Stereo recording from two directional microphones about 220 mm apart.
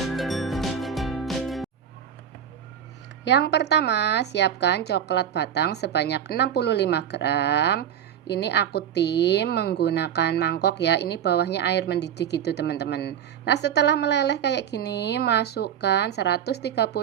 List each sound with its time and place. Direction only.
0.0 s music: centre (ahead or behind)
3.2 s speech: 50° left (ahead or behind)